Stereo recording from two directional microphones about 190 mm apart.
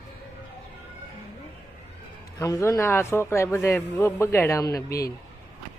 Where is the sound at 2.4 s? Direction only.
15° left (ahead or behind).